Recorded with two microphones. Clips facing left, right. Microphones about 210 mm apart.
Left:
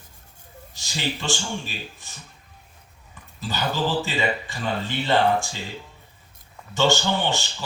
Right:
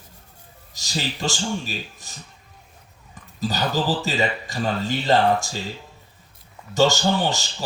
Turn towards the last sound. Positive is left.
turn(degrees=-40)  # may be behind; listen again after turning